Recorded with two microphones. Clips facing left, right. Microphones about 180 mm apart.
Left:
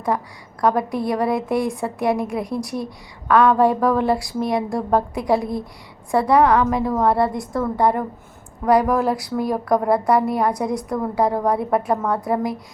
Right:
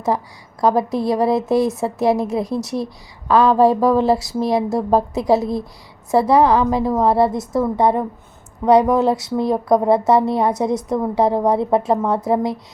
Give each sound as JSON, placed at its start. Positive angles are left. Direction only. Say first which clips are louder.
{"t": 0.6, "sound": "a woman's voice", "louder": "right 3 dB", "side_deg": -25}